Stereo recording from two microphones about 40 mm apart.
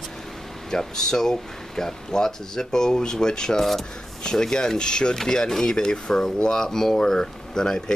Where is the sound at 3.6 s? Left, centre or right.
Centre.